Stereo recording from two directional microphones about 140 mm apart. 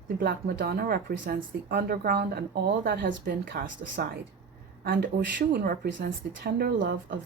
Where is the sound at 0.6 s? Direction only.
90° right.